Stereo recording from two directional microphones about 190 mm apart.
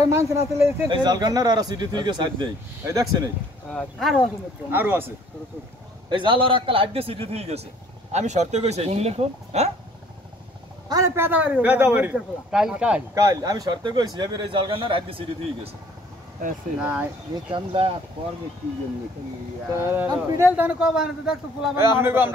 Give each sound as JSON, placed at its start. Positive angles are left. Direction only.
{"t": 0.0, "sound": "a man's voice", "side_deg": -15}
{"t": 3.7, "sound": "speech", "side_deg": 0}
{"t": 4.6, "sound": "a man's voice", "side_deg": -10}
{"t": 6.0, "sound": "a man's voice", "side_deg": -25}
{"t": 10.9, "sound": "a man's voice", "side_deg": -15}
{"t": 13.1, "sound": "a man's voice", "side_deg": -15}
{"t": 16.8, "sound": "a man's voice", "side_deg": -10}
{"t": 17.5, "sound": "a man's voice", "side_deg": -30}
{"t": 19.7, "sound": "a man's voice", "side_deg": -10}